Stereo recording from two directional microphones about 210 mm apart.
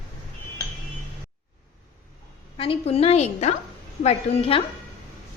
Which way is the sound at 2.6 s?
30° left (ahead or behind).